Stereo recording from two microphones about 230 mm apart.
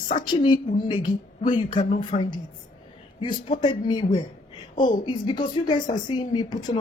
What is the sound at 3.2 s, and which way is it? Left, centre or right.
A woman's voice, centre.